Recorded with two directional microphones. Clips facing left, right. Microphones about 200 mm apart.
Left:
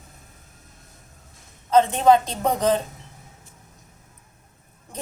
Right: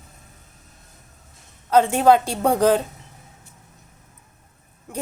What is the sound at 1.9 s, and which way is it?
Speech, 10° right (ahead or behind).